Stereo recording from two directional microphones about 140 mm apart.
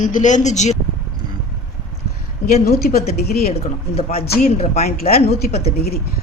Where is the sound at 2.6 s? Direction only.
90° left.